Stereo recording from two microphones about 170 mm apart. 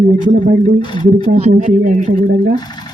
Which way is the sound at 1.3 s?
40° right (ahead or behind).